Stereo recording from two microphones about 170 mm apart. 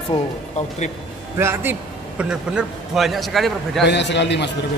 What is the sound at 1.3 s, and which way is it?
A man's voice, 15° right (ahead or behind).